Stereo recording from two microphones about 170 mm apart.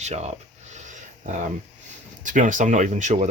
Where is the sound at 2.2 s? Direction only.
50° right (ahead or behind).